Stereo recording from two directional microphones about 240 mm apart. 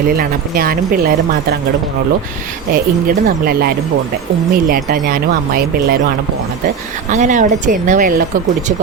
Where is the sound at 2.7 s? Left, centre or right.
Right.